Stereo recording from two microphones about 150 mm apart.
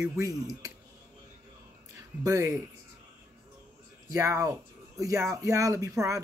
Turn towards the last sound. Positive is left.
turn(degrees=-20)  # may be behind; listen again after turning